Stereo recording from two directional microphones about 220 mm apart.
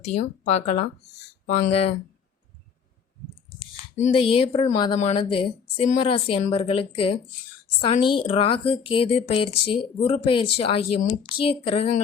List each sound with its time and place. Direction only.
0.0 s speech: 30° left (ahead or behind)
4.0 s speech: 25° left (ahead or behind)